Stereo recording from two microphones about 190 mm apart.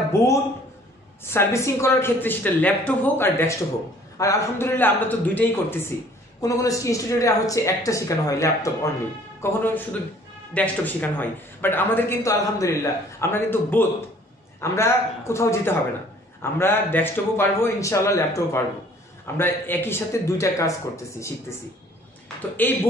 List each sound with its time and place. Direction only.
0.1 s speech: 15° left (ahead or behind)
22.6 s speech: 10° left (ahead or behind)